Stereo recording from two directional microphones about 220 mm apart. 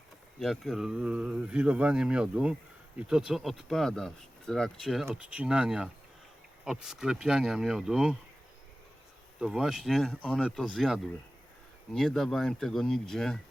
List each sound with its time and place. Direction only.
0.3 s speech: centre (ahead or behind)
9.4 s speech: centre (ahead or behind)